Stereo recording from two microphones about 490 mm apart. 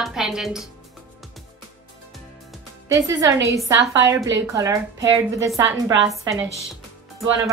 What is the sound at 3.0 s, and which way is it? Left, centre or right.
A woman's voice, centre.